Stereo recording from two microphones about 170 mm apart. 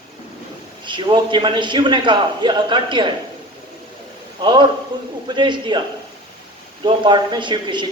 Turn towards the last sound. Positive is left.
turn(degrees=-25)  # may be behind; listen again after turning